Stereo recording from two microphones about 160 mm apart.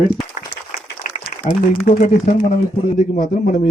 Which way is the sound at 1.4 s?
55° left (ahead or behind).